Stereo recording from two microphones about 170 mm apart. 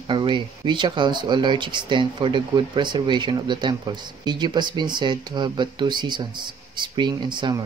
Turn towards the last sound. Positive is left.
turn(degrees=-25)  # may be behind; listen again after turning